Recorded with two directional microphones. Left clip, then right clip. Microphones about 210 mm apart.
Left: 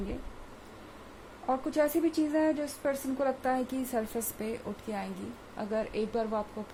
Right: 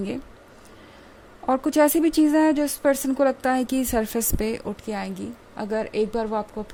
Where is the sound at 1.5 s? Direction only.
45° right (ahead or behind).